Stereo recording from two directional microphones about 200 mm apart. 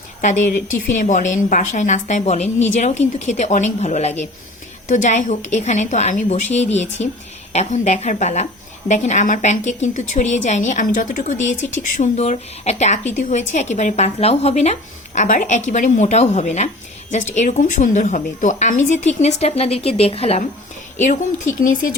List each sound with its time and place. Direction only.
0.2 s a woman's voice: 40° left (ahead or behind)